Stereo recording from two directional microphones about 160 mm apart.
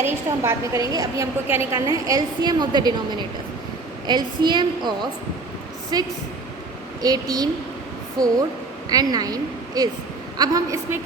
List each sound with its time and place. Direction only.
0.0 s a woman's voice: 20° right (ahead or behind)
4.0 s a woman's voice: 25° right (ahead or behind)